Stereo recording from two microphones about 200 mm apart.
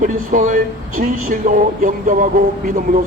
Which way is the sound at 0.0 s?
40° right (ahead or behind).